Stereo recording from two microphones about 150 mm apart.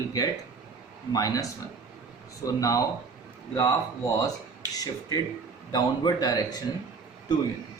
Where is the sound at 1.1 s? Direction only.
25° left (ahead or behind).